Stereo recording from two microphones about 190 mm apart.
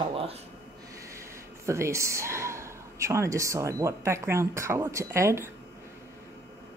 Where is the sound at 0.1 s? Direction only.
30° right (ahead or behind).